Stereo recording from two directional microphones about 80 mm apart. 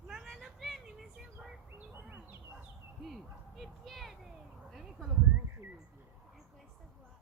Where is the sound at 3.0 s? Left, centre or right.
Centre.